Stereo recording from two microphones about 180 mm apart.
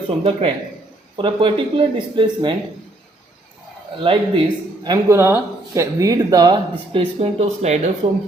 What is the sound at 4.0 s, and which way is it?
Speech, 30° right (ahead or behind).